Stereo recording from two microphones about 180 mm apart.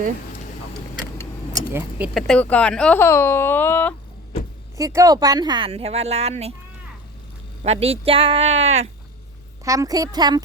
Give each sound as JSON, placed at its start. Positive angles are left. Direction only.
{"t": 1.5, "sound": "speech", "side_deg": -10}
{"t": 2.1, "sound": "speech", "side_deg": 0}
{"t": 4.8, "sound": "speech", "side_deg": -15}
{"t": 7.6, "sound": "speech", "side_deg": -35}
{"t": 9.6, "sound": "speech", "side_deg": -20}